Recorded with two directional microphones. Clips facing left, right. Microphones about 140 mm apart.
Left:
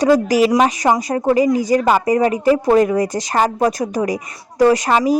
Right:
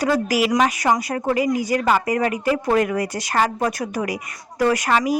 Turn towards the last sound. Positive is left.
turn(degrees=30)  # may be behind; listen again after turning